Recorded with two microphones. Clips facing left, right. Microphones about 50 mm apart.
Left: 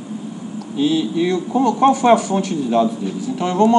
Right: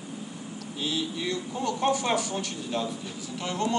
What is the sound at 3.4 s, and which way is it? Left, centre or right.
Speech, left.